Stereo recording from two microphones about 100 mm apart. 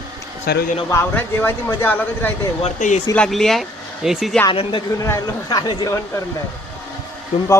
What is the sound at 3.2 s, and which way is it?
Speech, 5° left (ahead or behind).